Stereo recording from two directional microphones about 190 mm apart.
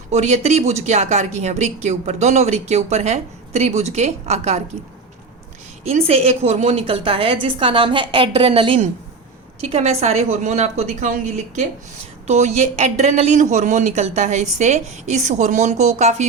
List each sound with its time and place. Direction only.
0.1 s a woman's voice: 35° right (ahead or behind)
5.8 s a woman's voice: 35° right (ahead or behind)